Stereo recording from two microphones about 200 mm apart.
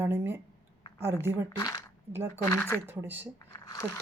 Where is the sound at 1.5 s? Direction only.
15° left (ahead or behind).